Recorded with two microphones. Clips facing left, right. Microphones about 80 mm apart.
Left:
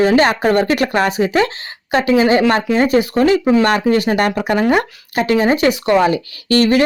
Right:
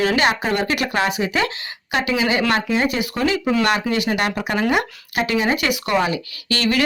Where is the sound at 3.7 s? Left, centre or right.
Left.